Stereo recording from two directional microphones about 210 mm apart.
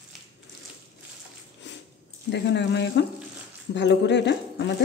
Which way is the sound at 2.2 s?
55° left (ahead or behind).